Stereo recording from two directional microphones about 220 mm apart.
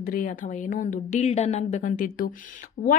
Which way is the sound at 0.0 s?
40° left (ahead or behind).